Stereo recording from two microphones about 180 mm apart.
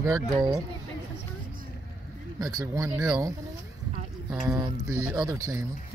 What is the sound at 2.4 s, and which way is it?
Speech, 20° right (ahead or behind).